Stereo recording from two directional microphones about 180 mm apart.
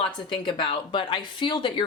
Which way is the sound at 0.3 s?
30° left (ahead or behind).